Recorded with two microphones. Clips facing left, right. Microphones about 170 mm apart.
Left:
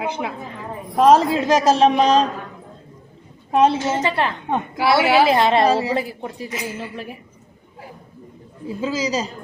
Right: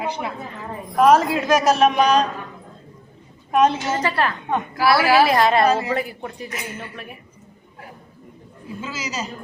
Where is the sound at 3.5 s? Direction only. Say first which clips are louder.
Left 1 dB; 25° left (ahead or behind).